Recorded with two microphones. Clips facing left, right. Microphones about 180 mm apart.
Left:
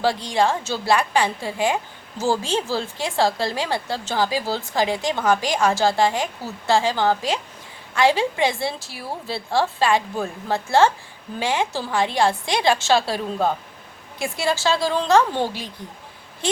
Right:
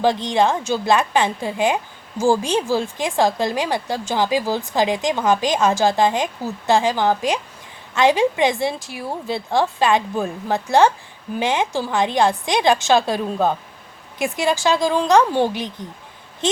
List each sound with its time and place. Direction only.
0.0 s a woman's voice: 20° right (ahead or behind)